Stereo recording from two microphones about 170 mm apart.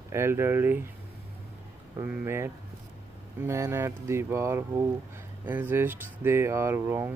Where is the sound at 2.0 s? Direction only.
15° right (ahead or behind).